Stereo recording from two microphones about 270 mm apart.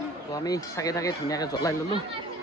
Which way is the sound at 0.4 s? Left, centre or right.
Centre.